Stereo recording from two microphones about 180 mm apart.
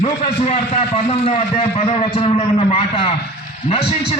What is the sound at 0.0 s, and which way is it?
A man's voice, 35° left (ahead or behind).